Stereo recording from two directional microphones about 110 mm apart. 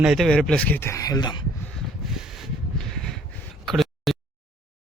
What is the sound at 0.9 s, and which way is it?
Speech, 35° left (ahead or behind).